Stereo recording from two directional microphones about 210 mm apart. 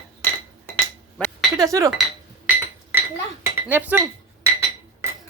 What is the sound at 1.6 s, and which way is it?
Speech, 15° right (ahead or behind).